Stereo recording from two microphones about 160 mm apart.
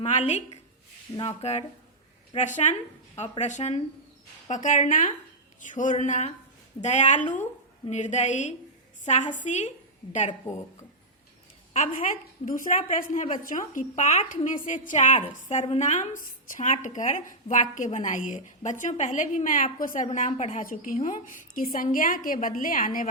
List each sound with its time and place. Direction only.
0.0 s a woman's voice: 45° left (ahead or behind)
12.5 s a woman's voice: 55° left (ahead or behind)
20.1 s a woman's voice: 45° left (ahead or behind)